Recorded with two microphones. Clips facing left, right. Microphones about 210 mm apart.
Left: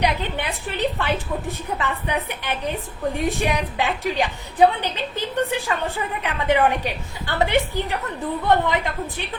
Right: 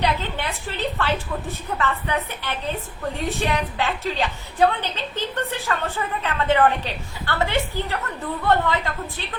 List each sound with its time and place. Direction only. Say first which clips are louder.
0.0 s a woman's voice: left 1 dB; 15° left (ahead or behind)